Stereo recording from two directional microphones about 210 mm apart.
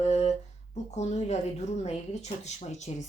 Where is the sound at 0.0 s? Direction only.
30° left (ahead or behind).